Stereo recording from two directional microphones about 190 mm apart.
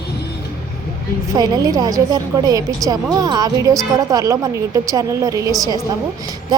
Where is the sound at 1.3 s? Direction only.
20° right (ahead or behind).